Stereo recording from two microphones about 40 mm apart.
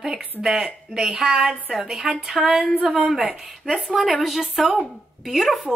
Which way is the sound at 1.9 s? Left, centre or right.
Centre.